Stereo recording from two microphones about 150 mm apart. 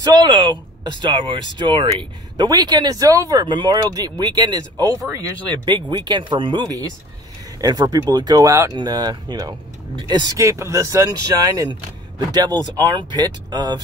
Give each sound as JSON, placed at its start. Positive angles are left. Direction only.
{"t": 0.0, "sound": "speech", "side_deg": -25}